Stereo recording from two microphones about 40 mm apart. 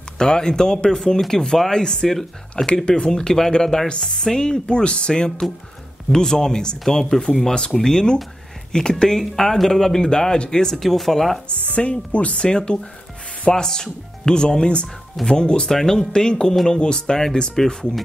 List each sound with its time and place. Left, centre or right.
0.2 s speech: centre
10.8 s speech: centre
11.4 s speech: left
12.4 s speech: left